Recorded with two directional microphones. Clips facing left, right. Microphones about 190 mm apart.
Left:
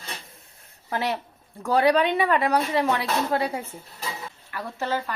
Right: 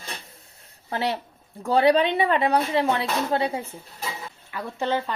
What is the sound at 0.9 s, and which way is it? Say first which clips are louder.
A woman's voice: right 1 dB; 30° right (ahead or behind).